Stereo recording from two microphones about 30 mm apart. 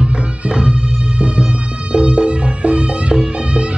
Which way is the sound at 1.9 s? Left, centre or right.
Right.